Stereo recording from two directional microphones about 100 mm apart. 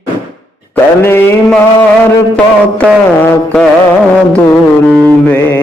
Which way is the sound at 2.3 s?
10° left (ahead or behind).